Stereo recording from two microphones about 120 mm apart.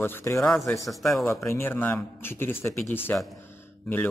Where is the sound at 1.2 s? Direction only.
25° left (ahead or behind).